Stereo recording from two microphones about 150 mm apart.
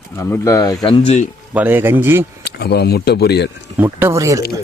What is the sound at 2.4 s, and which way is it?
Speech, 90° left.